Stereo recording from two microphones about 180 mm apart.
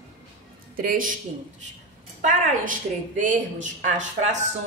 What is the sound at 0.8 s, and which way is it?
Speech, 50° right (ahead or behind).